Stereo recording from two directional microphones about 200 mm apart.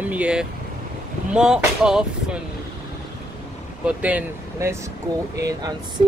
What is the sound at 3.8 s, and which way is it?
Speech, 5° right (ahead or behind).